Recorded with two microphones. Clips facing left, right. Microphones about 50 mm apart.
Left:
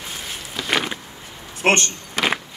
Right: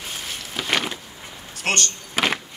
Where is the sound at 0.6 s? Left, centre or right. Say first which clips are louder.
Left 1 dB; centre.